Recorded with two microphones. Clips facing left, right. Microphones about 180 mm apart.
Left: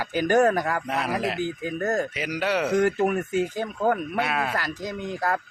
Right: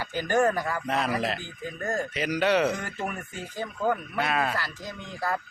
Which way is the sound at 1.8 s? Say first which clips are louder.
Left 4 dB; 40° left (ahead or behind).